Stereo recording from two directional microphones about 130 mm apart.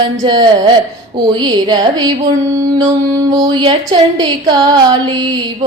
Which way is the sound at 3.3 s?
40° right (ahead or behind).